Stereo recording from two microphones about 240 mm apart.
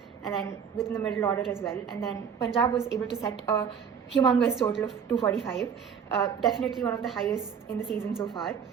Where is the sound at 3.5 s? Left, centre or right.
Left.